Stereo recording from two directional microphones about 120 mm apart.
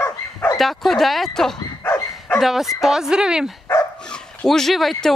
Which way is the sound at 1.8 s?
20° left (ahead or behind).